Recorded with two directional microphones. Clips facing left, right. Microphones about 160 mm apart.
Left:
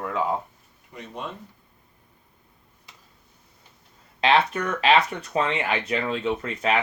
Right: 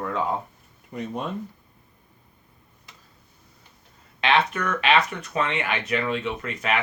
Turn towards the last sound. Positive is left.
turn(degrees=30)  # may be behind; listen again after turning